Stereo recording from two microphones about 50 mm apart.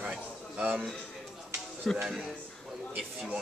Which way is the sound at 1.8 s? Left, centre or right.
Centre.